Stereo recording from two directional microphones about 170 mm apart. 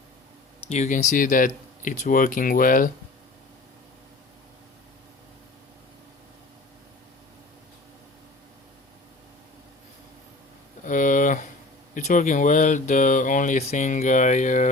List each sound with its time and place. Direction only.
0.7 s speech: 45° left (ahead or behind)
10.8 s a sound: 50° left (ahead or behind)
11.9 s speech: 50° left (ahead or behind)